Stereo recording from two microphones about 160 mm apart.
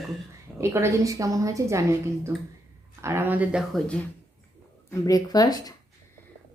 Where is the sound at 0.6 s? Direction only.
15° right (ahead or behind).